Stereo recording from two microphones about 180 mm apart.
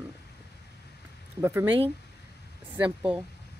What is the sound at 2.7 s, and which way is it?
Speech, 10° right (ahead or behind).